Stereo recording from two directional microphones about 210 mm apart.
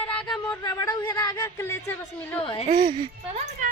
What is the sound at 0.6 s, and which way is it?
Speech, 15° left (ahead or behind).